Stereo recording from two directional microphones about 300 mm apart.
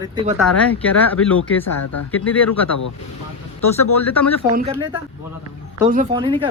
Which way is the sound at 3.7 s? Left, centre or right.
Centre.